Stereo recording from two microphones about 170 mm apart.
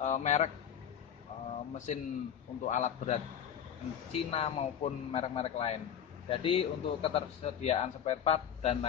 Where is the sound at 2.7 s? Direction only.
45° left (ahead or behind).